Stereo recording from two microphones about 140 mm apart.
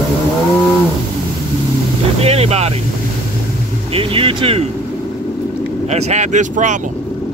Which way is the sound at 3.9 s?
40° right (ahead or behind).